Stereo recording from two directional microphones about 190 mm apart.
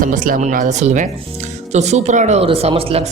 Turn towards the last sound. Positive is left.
turn(degrees=-30)  # may be behind; listen again after turning